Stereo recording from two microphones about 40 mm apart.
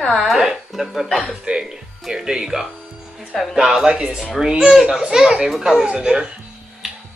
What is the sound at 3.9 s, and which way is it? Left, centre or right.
Speech, right.